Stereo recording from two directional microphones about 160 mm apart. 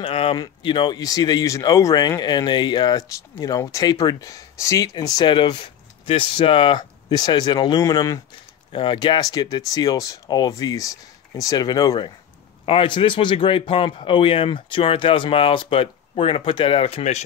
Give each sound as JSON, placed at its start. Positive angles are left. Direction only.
{"t": 0.0, "sound": "a man's voice", "side_deg": 35}